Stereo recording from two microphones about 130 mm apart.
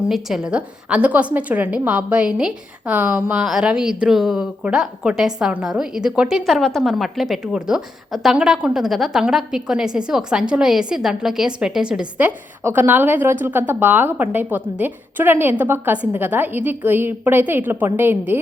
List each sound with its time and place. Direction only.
0.1 s a woman's voice: 5° right (ahead or behind)